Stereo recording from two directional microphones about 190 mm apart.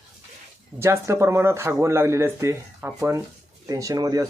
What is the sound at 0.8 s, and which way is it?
Speech, 15° right (ahead or behind).